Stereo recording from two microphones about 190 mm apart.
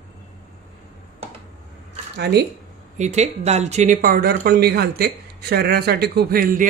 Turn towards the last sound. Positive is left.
turn(degrees=-50)  # may be behind; listen again after turning